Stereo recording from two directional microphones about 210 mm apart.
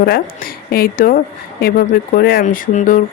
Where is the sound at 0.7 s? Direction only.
45° left (ahead or behind).